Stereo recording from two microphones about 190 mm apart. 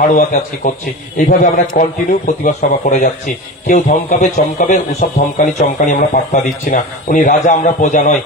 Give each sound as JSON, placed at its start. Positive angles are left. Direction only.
{"t": 0.0, "sound": "a man's voice", "side_deg": 45}